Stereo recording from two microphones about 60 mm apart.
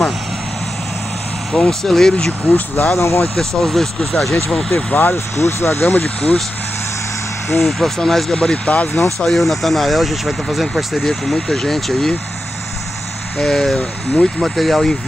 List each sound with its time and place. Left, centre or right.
1.5 s speech: centre
2.4 s speech: left
3.0 s speech: left
3.3 s speech: centre
4.9 s speech: left
5.9 s speech: left
7.6 s speech: centre; by 9.0 s left
9.2 s speech: centre
13.4 s speech: centre